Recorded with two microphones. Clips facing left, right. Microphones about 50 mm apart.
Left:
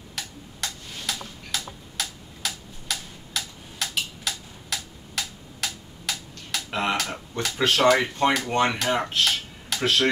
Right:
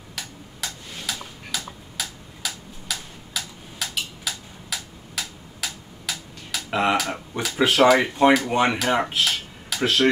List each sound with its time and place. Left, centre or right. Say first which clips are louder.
0.1 s tick-tock: right 1 dB; centre